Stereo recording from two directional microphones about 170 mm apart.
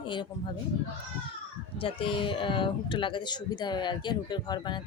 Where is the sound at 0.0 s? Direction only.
30° left (ahead or behind).